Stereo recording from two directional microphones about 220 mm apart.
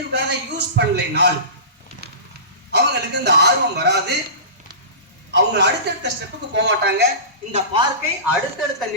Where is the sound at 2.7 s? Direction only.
50° right (ahead or behind).